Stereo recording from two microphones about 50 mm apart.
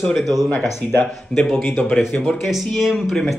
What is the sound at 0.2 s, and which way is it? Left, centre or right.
Speech, centre.